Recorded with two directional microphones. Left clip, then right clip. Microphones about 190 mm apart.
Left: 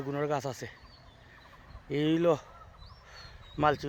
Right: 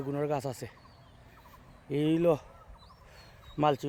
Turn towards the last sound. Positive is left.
turn(degrees=-10)  # may be behind; listen again after turning